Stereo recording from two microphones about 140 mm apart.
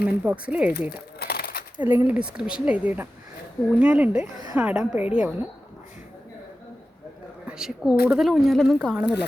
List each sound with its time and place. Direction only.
0.0 s speech: 10° right (ahead or behind)
1.2 s a sound: 90° left
1.8 s speech: 15° right (ahead or behind)
7.4 s speech: 5° right (ahead or behind)